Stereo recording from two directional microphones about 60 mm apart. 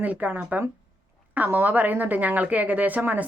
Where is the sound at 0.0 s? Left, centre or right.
Right.